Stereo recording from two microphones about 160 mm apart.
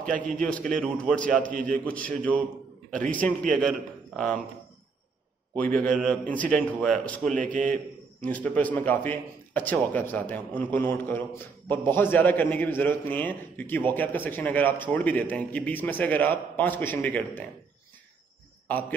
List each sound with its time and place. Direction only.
0.0 s a man's voice: 55° right (ahead or behind)
0.3 s a man's voice: 5° left (ahead or behind)
1.5 s a man's voice: 55° right (ahead or behind)
1.9 s a man's voice: 10° left (ahead or behind)
5.6 s a man's voice: 5° left (ahead or behind)
18.7 s a man's voice: 10° left (ahead or behind)